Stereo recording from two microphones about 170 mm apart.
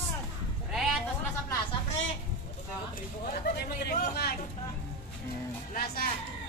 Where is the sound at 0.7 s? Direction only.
Centre (ahead or behind).